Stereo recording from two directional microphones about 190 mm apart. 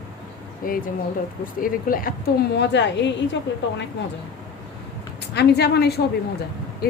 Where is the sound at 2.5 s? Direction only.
65° left (ahead or behind).